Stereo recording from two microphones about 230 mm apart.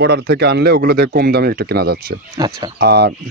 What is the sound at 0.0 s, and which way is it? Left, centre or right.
Speech, right.